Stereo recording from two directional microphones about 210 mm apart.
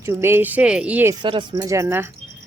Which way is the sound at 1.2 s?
20° right (ahead or behind).